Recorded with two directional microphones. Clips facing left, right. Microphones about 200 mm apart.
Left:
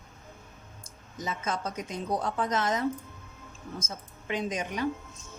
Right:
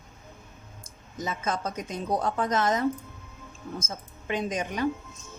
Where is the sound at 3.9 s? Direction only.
45° right (ahead or behind).